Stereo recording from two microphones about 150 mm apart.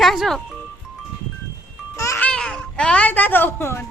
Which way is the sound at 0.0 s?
Centre (ahead or behind).